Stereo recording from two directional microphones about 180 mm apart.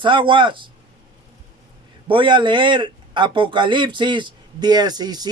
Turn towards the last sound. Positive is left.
turn(degrees=-20)  # may be behind; listen again after turning